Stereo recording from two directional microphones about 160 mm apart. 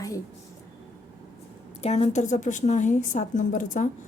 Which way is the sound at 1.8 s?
40° left (ahead or behind).